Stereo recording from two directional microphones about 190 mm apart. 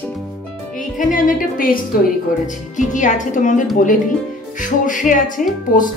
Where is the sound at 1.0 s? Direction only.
45° left (ahead or behind).